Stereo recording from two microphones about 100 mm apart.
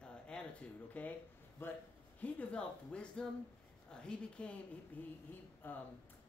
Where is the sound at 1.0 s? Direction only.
15° left (ahead or behind).